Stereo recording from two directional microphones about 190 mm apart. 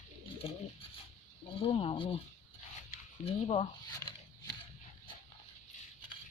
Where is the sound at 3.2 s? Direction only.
30° left (ahead or behind).